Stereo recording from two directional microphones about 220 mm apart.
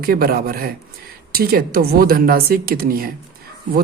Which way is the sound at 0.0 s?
45° right (ahead or behind).